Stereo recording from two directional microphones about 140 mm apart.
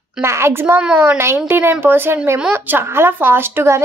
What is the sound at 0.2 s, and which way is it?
Speech, 20° right (ahead or behind).